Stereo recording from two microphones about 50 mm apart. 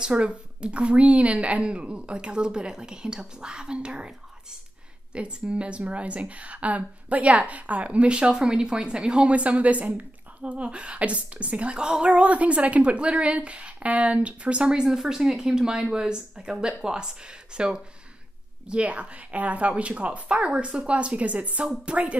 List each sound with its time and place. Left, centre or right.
0.0 s a woman's voice: centre